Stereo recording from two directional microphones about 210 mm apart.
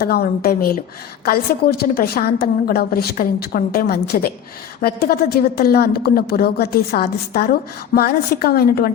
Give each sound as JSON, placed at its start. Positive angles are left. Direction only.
{"t": 0.0, "sound": "a woman's voice", "side_deg": 50}